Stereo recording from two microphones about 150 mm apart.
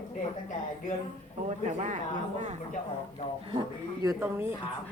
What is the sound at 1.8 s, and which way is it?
Speech, 50° right (ahead or behind).